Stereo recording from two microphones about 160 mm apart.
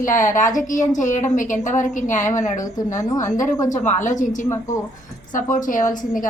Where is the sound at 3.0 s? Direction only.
20° left (ahead or behind).